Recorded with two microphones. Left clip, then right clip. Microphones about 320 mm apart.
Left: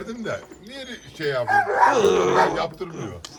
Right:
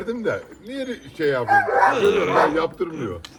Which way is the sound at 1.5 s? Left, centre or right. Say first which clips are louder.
Right 2 dB; right.